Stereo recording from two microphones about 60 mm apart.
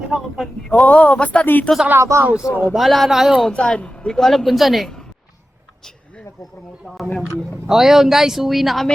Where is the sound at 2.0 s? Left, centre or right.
Right.